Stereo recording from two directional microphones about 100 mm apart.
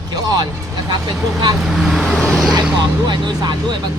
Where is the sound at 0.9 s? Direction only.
50° right (ahead or behind).